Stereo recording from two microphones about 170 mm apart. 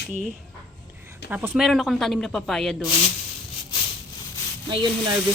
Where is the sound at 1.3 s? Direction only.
10° right (ahead or behind).